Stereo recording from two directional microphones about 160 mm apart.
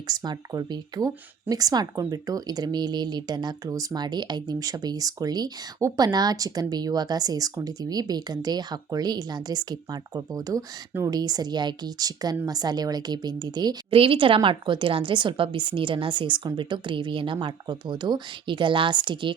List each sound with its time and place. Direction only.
0.1 s a woman's voice: 25° right (ahead or behind)